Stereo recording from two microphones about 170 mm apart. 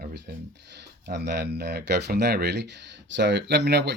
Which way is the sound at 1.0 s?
80° right.